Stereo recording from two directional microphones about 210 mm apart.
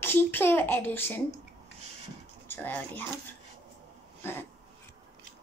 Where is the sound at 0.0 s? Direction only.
10° left (ahead or behind).